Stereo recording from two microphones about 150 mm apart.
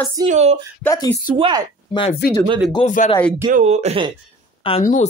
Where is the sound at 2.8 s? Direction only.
55° left (ahead or behind).